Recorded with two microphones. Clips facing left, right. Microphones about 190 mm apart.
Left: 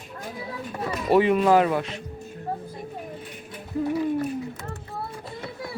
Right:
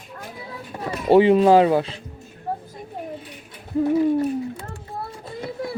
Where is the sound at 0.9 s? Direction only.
30° right (ahead or behind).